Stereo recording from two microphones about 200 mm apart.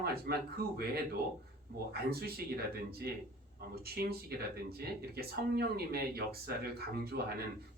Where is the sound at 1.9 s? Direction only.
50° right (ahead or behind).